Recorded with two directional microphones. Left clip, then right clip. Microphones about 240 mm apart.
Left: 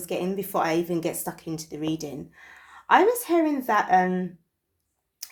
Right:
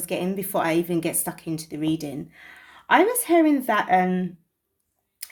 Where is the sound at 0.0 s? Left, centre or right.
Right.